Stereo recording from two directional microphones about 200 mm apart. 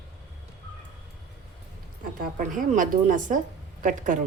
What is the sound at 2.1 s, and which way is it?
A woman's voice, 45° right (ahead or behind).